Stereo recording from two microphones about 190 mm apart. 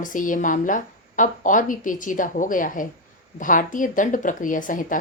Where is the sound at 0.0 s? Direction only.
45° left (ahead or behind).